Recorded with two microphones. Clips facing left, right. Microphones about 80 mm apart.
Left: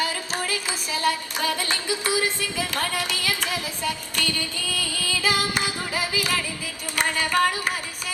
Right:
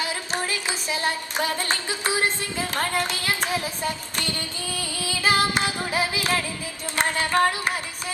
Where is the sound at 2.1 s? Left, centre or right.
Left.